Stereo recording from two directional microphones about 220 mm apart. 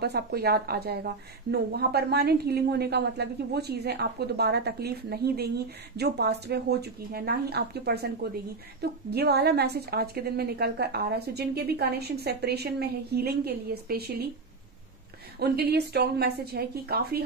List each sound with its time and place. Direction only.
0.0 s a woman's voice: 45° right (ahead or behind)
15.3 s a woman's voice: 45° right (ahead or behind)